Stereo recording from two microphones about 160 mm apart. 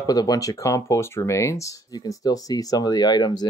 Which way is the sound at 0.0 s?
25° left (ahead or behind).